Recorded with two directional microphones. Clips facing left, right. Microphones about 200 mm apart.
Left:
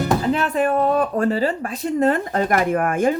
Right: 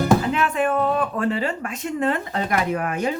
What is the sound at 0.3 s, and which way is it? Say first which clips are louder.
Speech: left 2 dB; 35° left (ahead or behind).